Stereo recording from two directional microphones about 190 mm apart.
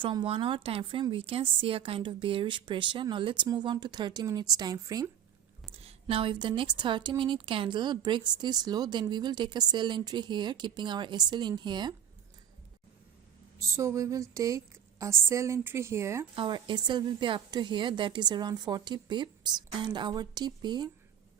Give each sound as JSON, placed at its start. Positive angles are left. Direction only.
{"t": 0.0, "sound": "a woman's voice", "side_deg": -25}
{"t": 5.7, "sound": "a woman's voice", "side_deg": -30}
{"t": 13.6, "sound": "a woman's voice", "side_deg": -15}
{"t": 16.3, "sound": "a woman's voice", "side_deg": -25}